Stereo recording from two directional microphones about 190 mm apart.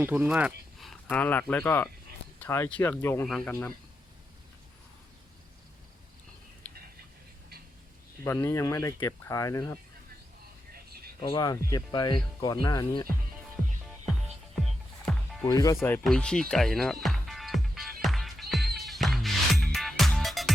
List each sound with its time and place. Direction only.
0.0 s speech: 10° right (ahead or behind)
8.2 s speech: 15° left (ahead or behind)
11.2 s speech: 25° left (ahead or behind)
14.6 s music: centre (ahead or behind)
15.4 s speech: 20° left (ahead or behind)
16.0 s music: 5° left (ahead or behind)